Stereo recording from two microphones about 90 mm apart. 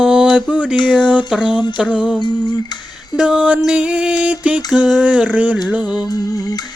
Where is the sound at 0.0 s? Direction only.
10° right (ahead or behind).